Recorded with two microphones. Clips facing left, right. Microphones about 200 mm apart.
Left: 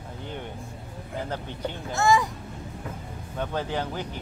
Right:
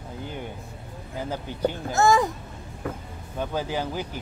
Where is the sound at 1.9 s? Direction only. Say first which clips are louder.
Right 2 dB; 45° right (ahead or behind).